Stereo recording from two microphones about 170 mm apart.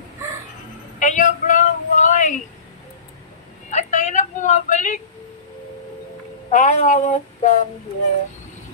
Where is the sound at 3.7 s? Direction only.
45° left (ahead or behind).